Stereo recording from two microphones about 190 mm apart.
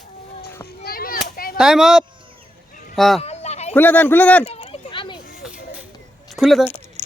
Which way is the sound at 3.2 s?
35° left (ahead or behind).